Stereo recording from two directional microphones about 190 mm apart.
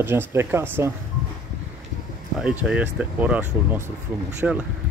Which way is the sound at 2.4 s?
5° right (ahead or behind).